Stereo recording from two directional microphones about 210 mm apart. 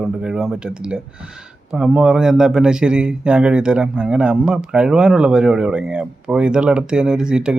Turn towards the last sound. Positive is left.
turn(degrees=-5)  # may be behind; listen again after turning